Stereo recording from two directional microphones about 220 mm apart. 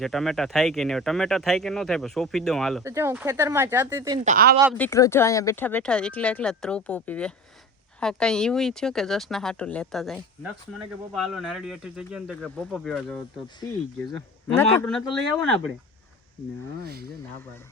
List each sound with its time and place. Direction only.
0.0 s speech: centre (ahead or behind)
2.8 s speech: 10° right (ahead or behind)
4.2 s speech: 35° right (ahead or behind)
4.8 s speech: 15° left (ahead or behind)
14.5 s speech: 10° left (ahead or behind)
16.8 s speech: 45° right (ahead or behind)